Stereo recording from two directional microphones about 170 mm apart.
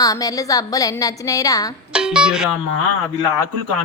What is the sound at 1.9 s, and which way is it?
Speech, 5° right (ahead or behind).